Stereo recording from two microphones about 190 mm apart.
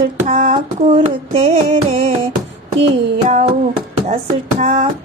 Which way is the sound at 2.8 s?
35° right (ahead or behind).